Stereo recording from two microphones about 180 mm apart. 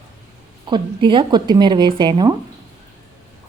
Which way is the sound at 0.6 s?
25° right (ahead or behind).